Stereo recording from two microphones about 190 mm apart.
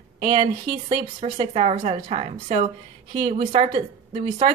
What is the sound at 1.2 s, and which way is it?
A woman's voice, 30° right (ahead or behind).